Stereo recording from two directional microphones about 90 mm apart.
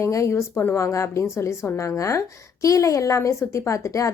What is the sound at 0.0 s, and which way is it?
A woman's voice, 35° left (ahead or behind).